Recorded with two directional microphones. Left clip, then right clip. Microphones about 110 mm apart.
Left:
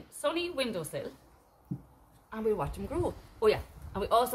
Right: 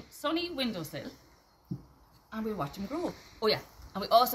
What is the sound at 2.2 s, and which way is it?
Speech, 25° left (ahead or behind).